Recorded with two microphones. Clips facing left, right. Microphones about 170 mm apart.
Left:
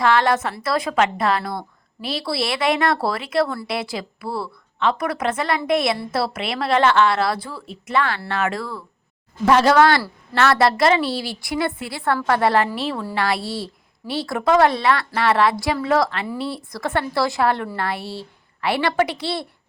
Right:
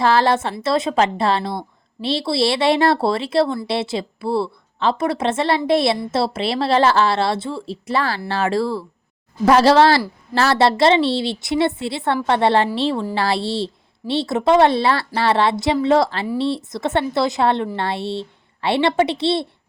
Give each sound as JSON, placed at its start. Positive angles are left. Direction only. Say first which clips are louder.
{"t": 0.0, "sound": "a woman's voice", "louder": "right 2 dB", "side_deg": -30}